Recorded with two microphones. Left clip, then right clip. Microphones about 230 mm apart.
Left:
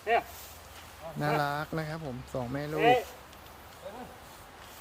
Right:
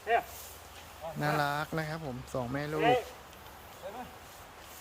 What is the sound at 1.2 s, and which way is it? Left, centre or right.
Speech, centre.